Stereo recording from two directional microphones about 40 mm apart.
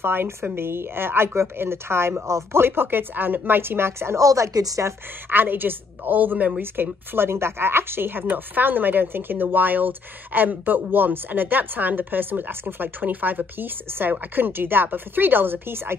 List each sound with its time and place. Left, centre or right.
0.0 s speech: right
0.6 s speech: right
2.5 s speech: right
5.3 s speech: right
6.6 s speech: right
13.0 s speech: right